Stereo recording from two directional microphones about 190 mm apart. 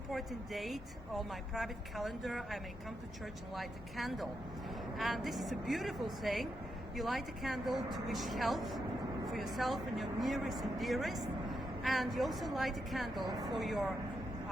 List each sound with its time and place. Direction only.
0.1 s speech: centre (ahead or behind)
13.2 s speech: 20° right (ahead or behind)
13.6 s speech: centre (ahead or behind)